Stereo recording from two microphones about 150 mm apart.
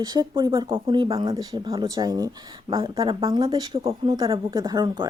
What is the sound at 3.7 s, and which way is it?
Speech, 35° right (ahead or behind).